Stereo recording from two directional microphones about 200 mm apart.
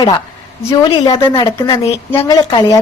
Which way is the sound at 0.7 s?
20° left (ahead or behind).